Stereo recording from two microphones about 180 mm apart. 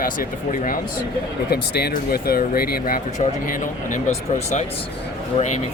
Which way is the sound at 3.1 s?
45° left (ahead or behind).